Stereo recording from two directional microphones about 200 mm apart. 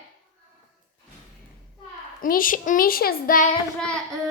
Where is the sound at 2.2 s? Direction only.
45° left (ahead or behind).